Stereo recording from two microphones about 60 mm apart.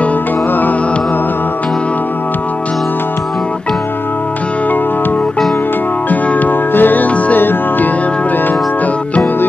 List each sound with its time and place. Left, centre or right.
6.0 s music: left